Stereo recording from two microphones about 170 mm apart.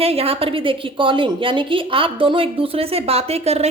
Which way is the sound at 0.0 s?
35° right (ahead or behind).